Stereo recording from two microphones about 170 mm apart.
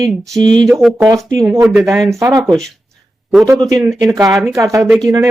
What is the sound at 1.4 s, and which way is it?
Speech, 20° right (ahead or behind).